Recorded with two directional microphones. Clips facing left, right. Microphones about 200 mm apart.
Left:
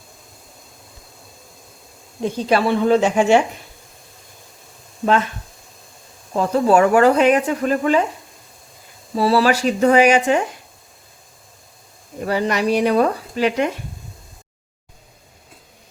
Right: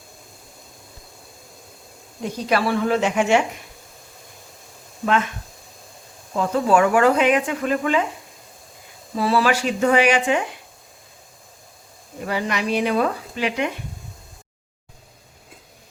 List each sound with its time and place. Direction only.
2.2 s speech: 25° left (ahead or behind)
6.3 s speech: 35° left (ahead or behind)
9.1 s speech: 35° left (ahead or behind)
12.2 s speech: 40° left (ahead or behind)